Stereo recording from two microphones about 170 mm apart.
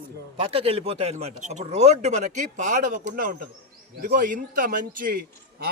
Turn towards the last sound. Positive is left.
turn(degrees=-55)  # may be behind; listen again after turning